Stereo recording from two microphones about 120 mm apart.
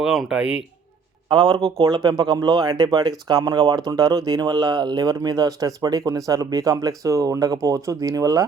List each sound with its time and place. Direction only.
0.0 s speech: 5° right (ahead or behind)
1.3 s speech: 40° right (ahead or behind)